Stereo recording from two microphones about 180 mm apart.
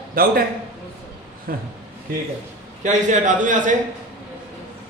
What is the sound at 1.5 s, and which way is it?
Speech, 50° right (ahead or behind).